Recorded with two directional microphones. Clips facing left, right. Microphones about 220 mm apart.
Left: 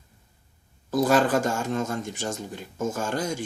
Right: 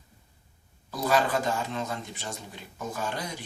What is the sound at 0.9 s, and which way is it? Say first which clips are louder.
Speech: left 5 dB; 45° left (ahead or behind).